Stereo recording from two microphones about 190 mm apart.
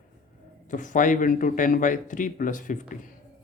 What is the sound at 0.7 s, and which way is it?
Speech, 40° left (ahead or behind).